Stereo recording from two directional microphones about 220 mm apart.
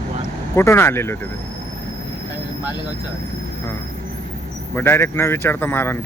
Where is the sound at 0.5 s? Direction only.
10° left (ahead or behind).